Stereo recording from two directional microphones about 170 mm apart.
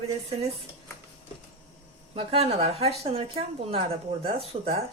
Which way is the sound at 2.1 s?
35° right (ahead or behind).